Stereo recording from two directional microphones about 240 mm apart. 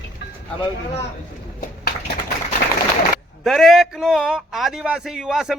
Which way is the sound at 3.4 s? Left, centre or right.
Centre.